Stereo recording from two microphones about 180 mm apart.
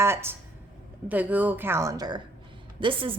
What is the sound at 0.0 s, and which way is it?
A woman's voice, 15° right (ahead or behind).